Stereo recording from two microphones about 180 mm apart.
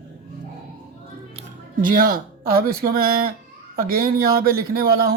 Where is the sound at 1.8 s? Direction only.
50° right (ahead or behind).